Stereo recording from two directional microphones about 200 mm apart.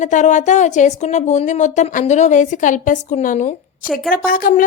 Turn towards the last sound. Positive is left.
turn(degrees=45)  # may be behind; listen again after turning